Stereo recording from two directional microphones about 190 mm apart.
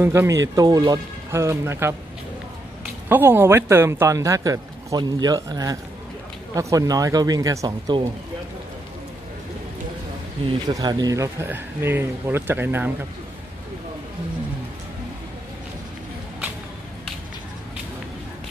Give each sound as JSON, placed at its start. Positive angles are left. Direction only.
{"t": 0.0, "sound": "a man's voice", "side_deg": -15}
{"t": 10.7, "sound": "a man's voice", "side_deg": -20}